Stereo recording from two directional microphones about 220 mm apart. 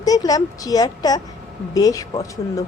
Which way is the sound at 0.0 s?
15° left (ahead or behind).